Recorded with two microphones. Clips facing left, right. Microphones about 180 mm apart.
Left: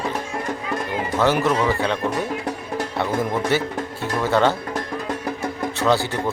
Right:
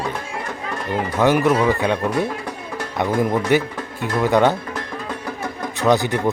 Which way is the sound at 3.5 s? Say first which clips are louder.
Right 3 dB; 15° right (ahead or behind).